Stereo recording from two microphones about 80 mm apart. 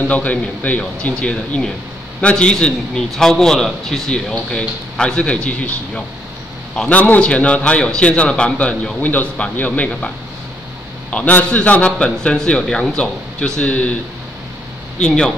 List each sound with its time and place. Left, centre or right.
0.0 s a man's voice: centre
15.0 s a man's voice: centre